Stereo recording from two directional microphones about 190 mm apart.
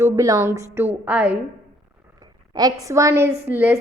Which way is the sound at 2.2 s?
20° right (ahead or behind).